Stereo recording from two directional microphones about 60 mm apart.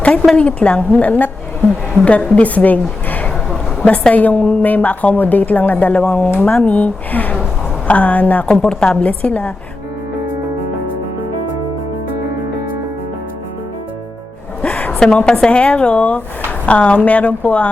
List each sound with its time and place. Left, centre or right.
0.3 s a woman's voice: centre
14.6 s a sound: left
14.9 s a woman's voice: centre